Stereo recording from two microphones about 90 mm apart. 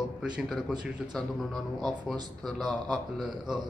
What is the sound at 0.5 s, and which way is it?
Speech, centre (ahead or behind).